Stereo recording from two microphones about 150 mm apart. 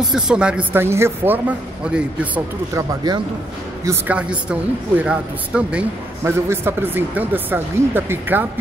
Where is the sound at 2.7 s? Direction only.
20° right (ahead or behind).